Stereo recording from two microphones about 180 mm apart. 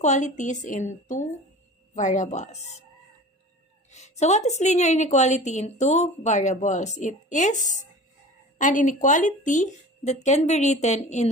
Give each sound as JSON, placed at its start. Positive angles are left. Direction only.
{"t": 0.0, "sound": "a woman's voice", "side_deg": 40}
{"t": 3.9, "sound": "a woman's voice", "side_deg": 40}